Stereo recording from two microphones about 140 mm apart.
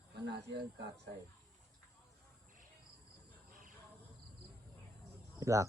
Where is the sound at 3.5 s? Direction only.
70° right (ahead or behind).